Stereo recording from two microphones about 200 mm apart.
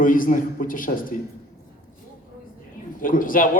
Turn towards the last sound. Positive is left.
turn(degrees=45)  # may be behind; listen again after turning